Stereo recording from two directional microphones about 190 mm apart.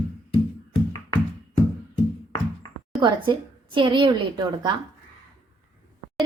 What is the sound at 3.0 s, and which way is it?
A woman's voice, 25° right (ahead or behind).